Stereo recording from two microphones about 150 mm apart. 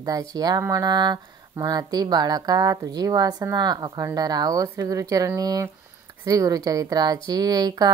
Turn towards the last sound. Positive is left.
turn(degrees=-25)  # may be behind; listen again after turning